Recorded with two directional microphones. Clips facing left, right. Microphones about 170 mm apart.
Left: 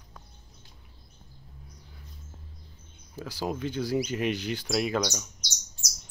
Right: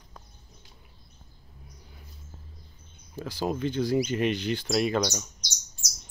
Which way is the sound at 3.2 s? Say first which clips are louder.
Right 3 dB; 5° left (ahead or behind).